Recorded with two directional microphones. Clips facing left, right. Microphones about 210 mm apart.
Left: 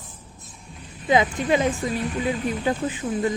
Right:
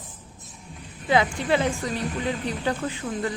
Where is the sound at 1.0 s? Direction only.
15° left (ahead or behind).